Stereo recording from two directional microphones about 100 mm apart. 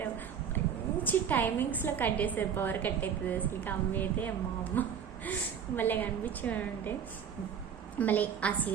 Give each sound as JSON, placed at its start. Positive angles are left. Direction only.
{"t": 0.6, "sound": "a sound", "side_deg": 20}
{"t": 1.0, "sound": "a woman's voice", "side_deg": 20}
{"t": 7.9, "sound": "a woman's voice", "side_deg": 15}